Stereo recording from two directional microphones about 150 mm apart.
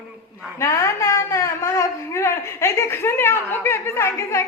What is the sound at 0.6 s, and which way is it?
A man's voice, 20° left (ahead or behind).